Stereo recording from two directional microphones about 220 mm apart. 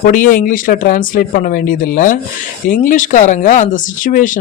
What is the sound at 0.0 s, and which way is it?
A man's voice, 40° left (ahead or behind).